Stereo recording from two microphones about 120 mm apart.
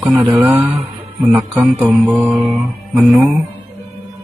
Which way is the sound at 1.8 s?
10° right (ahead or behind).